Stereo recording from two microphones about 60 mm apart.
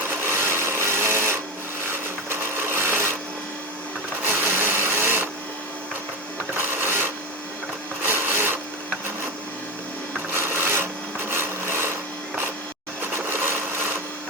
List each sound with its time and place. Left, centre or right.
0.2 s sewing machine: right
4.3 s sewing machine: right
6.6 s sewing machine: right
8.0 s a sound: right
10.3 s wood: right
13.0 s sewing machine: right